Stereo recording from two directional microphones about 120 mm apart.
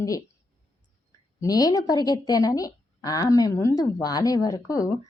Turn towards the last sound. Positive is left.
turn(degrees=30)  # may be behind; listen again after turning